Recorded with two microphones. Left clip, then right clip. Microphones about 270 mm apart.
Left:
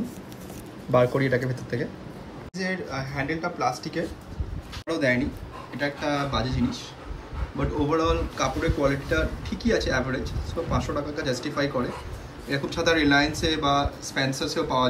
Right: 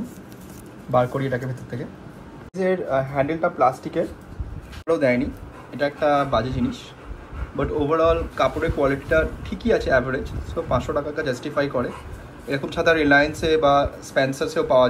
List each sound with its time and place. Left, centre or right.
0.9 s a man's voice: right
1.4 s speech: centre